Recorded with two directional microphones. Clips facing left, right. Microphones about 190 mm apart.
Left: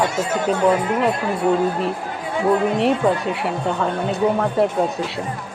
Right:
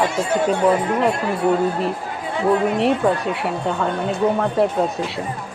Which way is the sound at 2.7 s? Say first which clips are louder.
Even; centre (ahead or behind).